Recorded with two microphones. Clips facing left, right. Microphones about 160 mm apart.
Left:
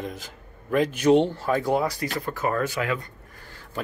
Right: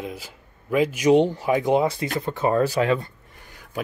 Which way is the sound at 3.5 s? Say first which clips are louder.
Even; 15° right (ahead or behind).